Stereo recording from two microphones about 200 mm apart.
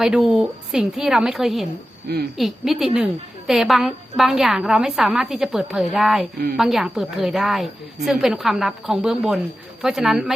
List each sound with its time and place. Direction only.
0.0 s a woman's voice: 5° right (ahead or behind)
2.1 s speech: 50° right (ahead or behind)
2.4 s a woman's voice: centre (ahead or behind)